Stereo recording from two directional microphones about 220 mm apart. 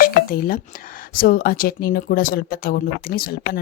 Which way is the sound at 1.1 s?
40° left (ahead or behind).